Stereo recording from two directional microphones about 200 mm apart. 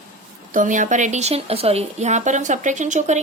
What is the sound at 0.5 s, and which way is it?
A woman's voice, 40° right (ahead or behind).